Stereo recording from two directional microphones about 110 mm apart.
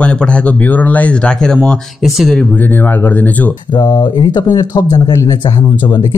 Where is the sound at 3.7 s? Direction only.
40° left (ahead or behind).